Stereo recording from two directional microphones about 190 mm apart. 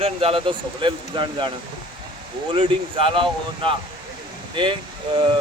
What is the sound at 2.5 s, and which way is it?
Speech, 30° right (ahead or behind).